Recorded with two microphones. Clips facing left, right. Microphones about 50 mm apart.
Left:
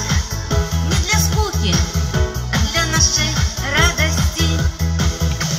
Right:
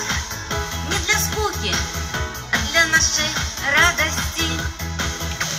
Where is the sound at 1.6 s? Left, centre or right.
Left.